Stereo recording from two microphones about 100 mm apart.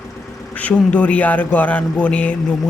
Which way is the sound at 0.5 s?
15° left (ahead or behind).